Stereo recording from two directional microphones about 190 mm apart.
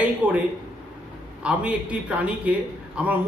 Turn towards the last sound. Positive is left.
turn(degrees=-10)  # may be behind; listen again after turning